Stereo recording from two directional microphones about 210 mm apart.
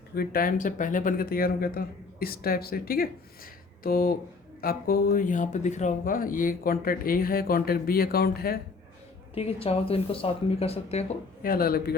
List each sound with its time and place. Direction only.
0.1 s speech: 45° left (ahead or behind)
9.3 s speech: 25° left (ahead or behind); by 11.9 s 45° left (ahead or behind)